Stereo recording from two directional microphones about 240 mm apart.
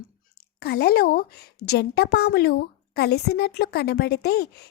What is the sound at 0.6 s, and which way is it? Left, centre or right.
A woman's voice, left.